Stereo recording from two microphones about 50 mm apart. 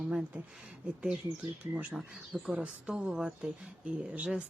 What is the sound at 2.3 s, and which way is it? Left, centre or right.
Speech, right.